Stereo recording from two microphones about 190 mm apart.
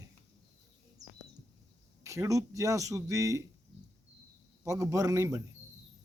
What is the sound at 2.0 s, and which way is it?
Speech, 15° right (ahead or behind).